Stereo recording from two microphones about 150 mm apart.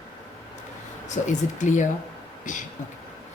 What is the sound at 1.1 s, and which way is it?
Speech, 55° left (ahead or behind).